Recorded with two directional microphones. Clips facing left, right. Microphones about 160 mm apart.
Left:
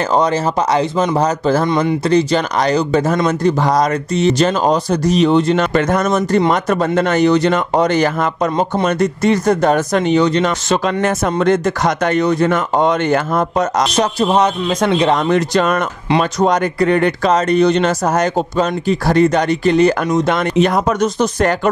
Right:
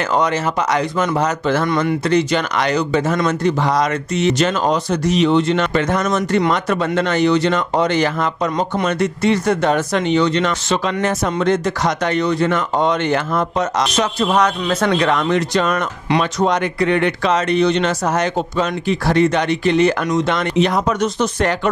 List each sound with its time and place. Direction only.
0.1 s speech: 35° left (ahead or behind)
1.7 s speech: 20° left (ahead or behind)
2.0 s speech: 35° left (ahead or behind)
14.7 s speech: 15° left (ahead or behind)
15.1 s speech: 45° left (ahead or behind)